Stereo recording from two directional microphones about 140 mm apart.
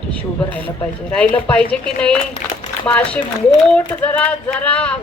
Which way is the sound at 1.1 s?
10° left (ahead or behind).